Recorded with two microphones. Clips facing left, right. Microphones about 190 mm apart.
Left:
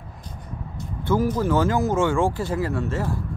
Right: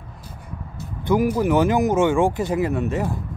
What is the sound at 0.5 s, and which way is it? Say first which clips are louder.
Speech: left 1 dB; 15° right (ahead or behind).